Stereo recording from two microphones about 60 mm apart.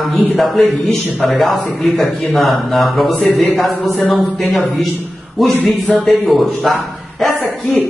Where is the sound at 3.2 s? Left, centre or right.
Left.